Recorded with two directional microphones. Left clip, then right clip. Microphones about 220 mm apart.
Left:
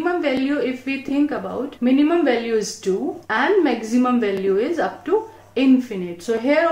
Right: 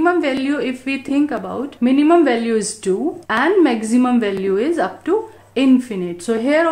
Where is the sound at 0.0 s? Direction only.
45° right (ahead or behind).